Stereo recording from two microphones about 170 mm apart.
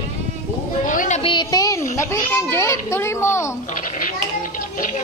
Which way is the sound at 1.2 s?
25° left (ahead or behind).